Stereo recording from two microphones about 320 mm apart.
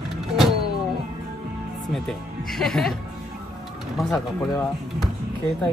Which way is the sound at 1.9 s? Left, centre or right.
Centre.